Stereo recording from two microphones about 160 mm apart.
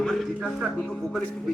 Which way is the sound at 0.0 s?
Centre (ahead or behind).